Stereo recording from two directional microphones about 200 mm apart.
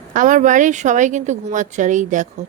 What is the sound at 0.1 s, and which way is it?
A woman's voice, 40° right (ahead or behind).